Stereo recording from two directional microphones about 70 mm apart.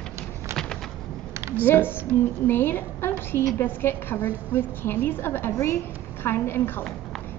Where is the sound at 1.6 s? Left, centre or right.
Left.